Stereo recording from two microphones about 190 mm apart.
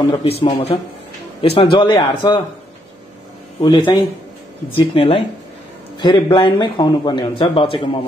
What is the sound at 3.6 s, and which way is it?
Speech, 25° left (ahead or behind).